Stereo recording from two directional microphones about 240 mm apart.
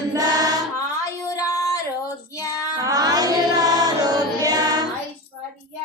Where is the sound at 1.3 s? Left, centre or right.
Centre.